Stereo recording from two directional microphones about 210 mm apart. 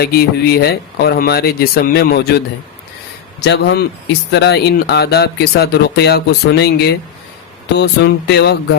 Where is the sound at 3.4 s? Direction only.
55° left (ahead or behind).